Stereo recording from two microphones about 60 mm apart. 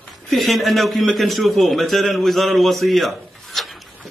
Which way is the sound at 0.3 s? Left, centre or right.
Centre.